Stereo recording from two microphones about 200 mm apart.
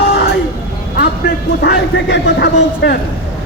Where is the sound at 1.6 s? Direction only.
55° left (ahead or behind).